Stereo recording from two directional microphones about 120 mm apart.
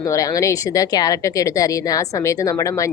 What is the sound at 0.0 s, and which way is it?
A woman's voice, 25° left (ahead or behind).